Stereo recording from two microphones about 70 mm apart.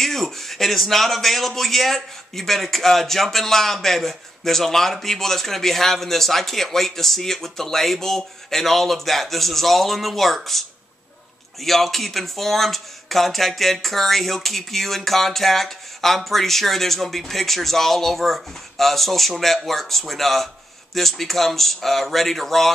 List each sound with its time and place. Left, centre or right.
0.0 s a man's voice: centre
11.6 s a man's voice: centre